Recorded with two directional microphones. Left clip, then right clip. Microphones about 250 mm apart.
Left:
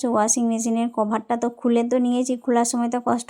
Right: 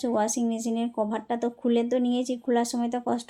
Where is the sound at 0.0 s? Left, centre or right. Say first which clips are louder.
Left 5 dB; left.